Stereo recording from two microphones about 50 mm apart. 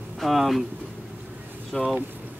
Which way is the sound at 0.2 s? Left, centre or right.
Centre.